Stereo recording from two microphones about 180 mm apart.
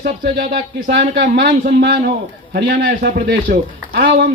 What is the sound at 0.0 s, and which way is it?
Speech, 55° right (ahead or behind).